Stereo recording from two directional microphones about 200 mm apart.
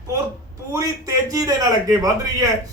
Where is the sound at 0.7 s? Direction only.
15° right (ahead or behind).